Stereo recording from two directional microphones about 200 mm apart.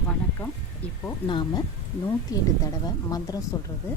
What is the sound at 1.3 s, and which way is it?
Speech, 20° left (ahead or behind).